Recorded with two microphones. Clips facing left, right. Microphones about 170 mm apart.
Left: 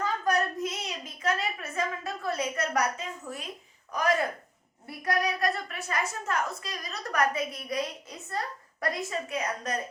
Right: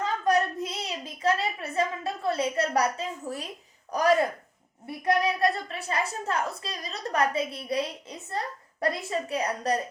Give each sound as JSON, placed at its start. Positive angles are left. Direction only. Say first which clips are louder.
{"t": 0.0, "sound": "a sound", "louder": "right 3 dB", "side_deg": -30}
{"t": 3.9, "sound": "a woman's voice", "louder": "right 4 dB", "side_deg": -35}
{"t": 4.9, "sound": "a woman's voice", "louder": "right 4 dB", "side_deg": -25}